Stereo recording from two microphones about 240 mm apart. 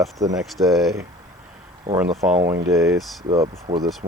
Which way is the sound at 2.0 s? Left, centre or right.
Centre.